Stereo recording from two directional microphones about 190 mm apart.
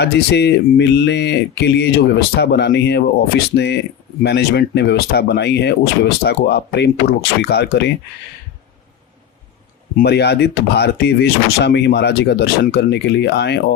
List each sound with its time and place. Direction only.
0.0 s speech: 60° left (ahead or behind)
9.9 s speech: 60° left (ahead or behind)